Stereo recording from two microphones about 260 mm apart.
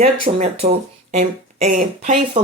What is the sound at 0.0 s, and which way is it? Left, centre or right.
Speech, right.